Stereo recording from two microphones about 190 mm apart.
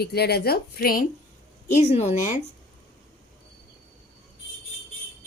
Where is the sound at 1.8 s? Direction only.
35° left (ahead or behind).